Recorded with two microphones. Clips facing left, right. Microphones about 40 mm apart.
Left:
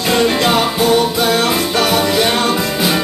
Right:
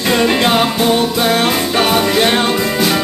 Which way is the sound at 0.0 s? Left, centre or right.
Centre.